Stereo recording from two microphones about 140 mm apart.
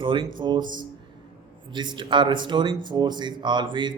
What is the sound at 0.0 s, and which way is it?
Speech, 35° right (ahead or behind).